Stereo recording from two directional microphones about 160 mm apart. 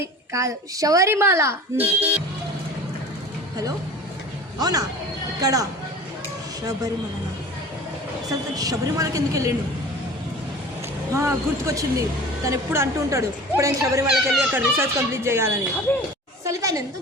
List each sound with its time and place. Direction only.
0.3 s speech: 20° right (ahead or behind)
4.6 s a woman's voice: 25° right (ahead or behind)
8.3 s a woman's voice: 20° right (ahead or behind)
11.1 s a woman's voice: 20° right (ahead or behind)